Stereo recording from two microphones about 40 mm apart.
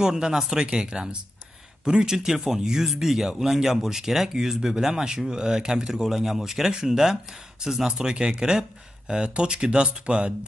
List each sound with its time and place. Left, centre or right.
0.0 s speech: centre